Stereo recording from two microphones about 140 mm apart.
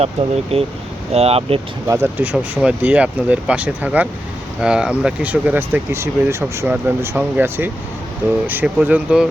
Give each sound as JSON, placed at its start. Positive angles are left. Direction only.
{"t": 0.0, "sound": "speech", "side_deg": -45}
{"t": 1.9, "sound": "speech", "side_deg": -15}